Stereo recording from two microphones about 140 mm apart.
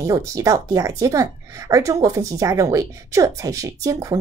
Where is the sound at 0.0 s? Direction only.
25° right (ahead or behind).